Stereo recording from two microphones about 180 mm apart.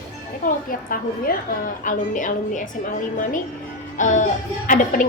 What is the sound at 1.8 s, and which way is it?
A woman's voice, 45° left (ahead or behind).